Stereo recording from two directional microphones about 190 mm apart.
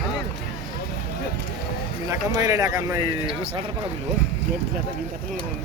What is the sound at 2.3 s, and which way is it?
Speech, 15° right (ahead or behind).